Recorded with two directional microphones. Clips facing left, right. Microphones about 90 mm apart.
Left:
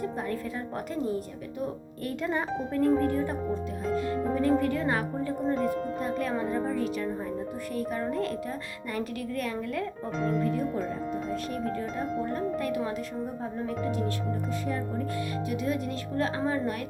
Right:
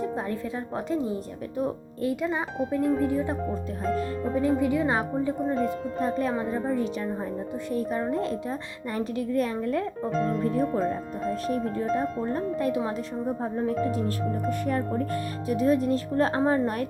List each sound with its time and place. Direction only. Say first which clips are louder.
0.2 s a woman's voice: right 2 dB; 25° right (ahead or behind)
2.2 s speech: right 2 dB; 5° right (ahead or behind)
4.4 s speech: right 3 dB; 15° right (ahead or behind)
6.0 s a woman's voice: right 3 dB; 30° right (ahead or behind)
14.7 s speech: right 5 dB; 55° right (ahead or behind)
15.4 s speech: right 10 dB; 40° right (ahead or behind)